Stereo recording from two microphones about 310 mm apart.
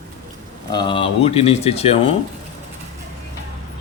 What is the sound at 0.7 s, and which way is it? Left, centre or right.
Speech, centre.